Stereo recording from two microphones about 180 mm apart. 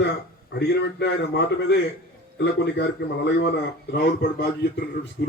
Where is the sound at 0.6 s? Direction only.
70° left (ahead or behind).